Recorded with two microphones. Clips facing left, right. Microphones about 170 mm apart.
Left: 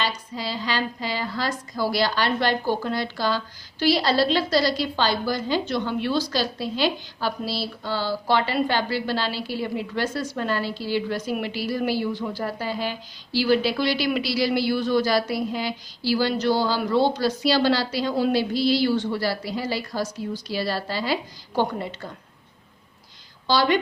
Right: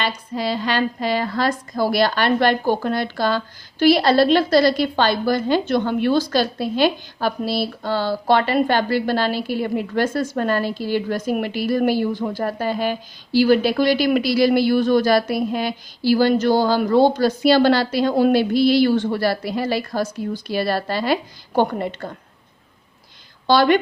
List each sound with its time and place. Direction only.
0.0 s a woman's voice: 55° right (ahead or behind)
23.5 s a woman's voice: 55° right (ahead or behind)